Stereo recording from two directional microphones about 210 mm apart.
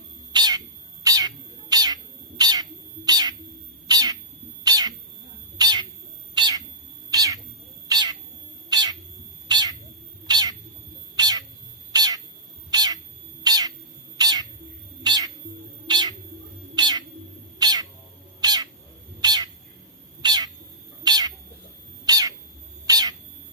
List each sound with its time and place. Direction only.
0.3 s cat: 20° right (ahead or behind)
6.3 s bird: 20° right (ahead or behind)
7.1 s cat: 15° right (ahead or behind)
7.9 s bird: 20° right (ahead or behind)
8.6 s cat: 20° right (ahead or behind)
17.6 s bird: 20° right (ahead or behind)
18.4 s cat: 20° right (ahead or behind)